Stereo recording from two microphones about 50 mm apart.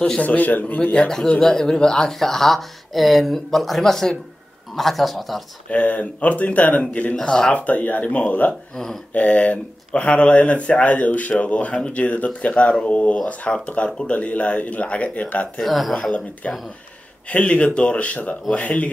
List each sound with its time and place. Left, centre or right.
0.2 s a man's voice: left
0.9 s a man's voice: centre
5.7 s speech: left
7.2 s speech: centre
7.5 s speech: left
15.6 s a man's voice: centre
16.4 s speech: left